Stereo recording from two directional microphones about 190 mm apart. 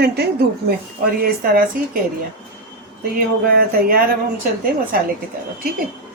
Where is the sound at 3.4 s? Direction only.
50° right (ahead or behind).